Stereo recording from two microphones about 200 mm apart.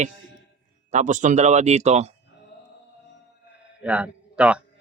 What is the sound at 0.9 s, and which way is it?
Speech, 35° right (ahead or behind).